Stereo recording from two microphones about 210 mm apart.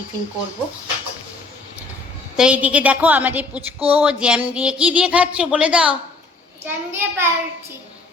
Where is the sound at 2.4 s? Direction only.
5° right (ahead or behind).